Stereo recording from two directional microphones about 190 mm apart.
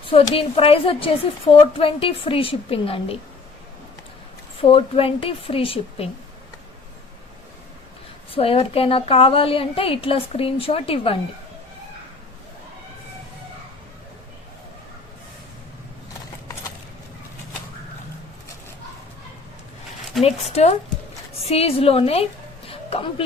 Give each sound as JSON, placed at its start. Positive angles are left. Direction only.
{"t": 0.1, "sound": "a woman's voice", "side_deg": 30}
{"t": 4.7, "sound": "a woman's voice", "side_deg": 30}
{"t": 8.3, "sound": "a woman's voice", "side_deg": 30}
{"t": 20.2, "sound": "a woman's voice", "side_deg": 35}